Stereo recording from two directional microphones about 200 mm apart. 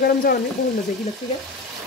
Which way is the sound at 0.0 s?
50° left (ahead or behind).